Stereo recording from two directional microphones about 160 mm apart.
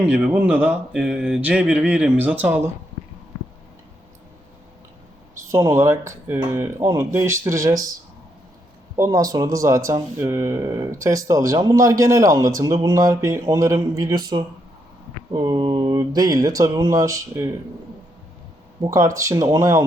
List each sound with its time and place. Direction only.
0.0 s speech: 10° right (ahead or behind)
5.5 s speech: 20° right (ahead or behind)
9.0 s speech: 20° right (ahead or behind)
18.8 s speech: 20° right (ahead or behind)